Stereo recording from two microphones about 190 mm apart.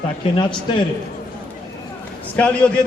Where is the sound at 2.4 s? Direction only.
5° left (ahead or behind).